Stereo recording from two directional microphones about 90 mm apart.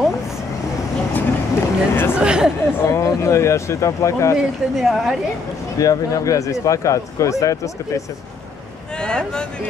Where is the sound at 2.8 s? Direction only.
35° left (ahead or behind).